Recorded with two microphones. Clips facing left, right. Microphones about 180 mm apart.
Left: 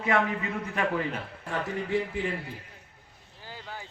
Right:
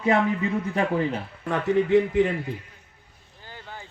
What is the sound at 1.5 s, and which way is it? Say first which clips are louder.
Speech: right 10 dB; 70° right (ahead or behind).